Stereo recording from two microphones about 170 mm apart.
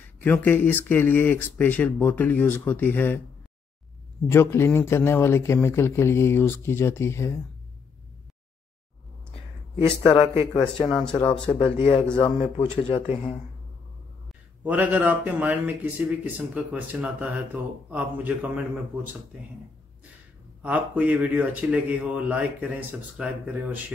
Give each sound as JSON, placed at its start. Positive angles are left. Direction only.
{"t": 0.2, "sound": "a man's voice", "side_deg": 10}
{"t": 4.3, "sound": "a man's voice", "side_deg": 15}
{"t": 9.3, "sound": "speech", "side_deg": 35}
{"t": 11.0, "sound": "speech", "side_deg": 5}
{"t": 11.5, "sound": "speech", "side_deg": 35}
{"t": 14.6, "sound": "a man's voice", "side_deg": -10}
{"t": 20.6, "sound": "a man's voice", "side_deg": -10}